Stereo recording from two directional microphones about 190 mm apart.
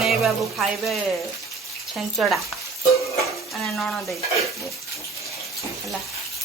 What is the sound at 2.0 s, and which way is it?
Speech, centre (ahead or behind).